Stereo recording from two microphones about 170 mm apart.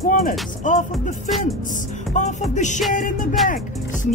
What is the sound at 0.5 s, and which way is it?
Speech, 50° left (ahead or behind).